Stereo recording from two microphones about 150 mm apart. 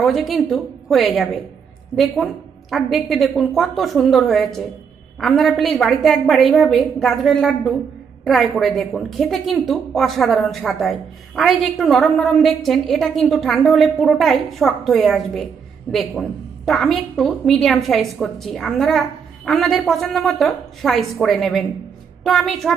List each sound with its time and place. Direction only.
0.0 s a woman's voice: centre (ahead or behind)